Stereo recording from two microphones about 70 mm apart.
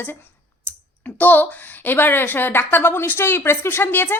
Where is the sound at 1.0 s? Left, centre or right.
Left.